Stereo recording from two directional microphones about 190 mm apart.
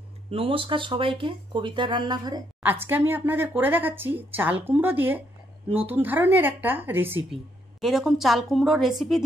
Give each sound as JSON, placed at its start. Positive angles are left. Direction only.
{"t": 0.3, "sound": "speech", "side_deg": -30}
{"t": 2.6, "sound": "speech", "side_deg": -10}
{"t": 7.3, "sound": "a woman's voice", "side_deg": 0}